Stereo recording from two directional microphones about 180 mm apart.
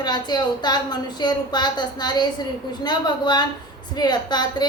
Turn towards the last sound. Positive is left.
turn(degrees=25)  # may be behind; listen again after turning